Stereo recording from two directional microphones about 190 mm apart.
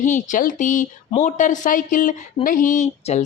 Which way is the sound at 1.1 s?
40° left (ahead or behind).